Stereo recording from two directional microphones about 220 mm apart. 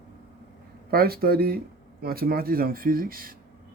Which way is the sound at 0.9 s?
45° right (ahead or behind).